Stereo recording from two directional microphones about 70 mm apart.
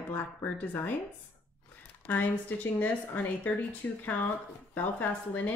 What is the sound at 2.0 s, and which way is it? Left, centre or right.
Speech, left.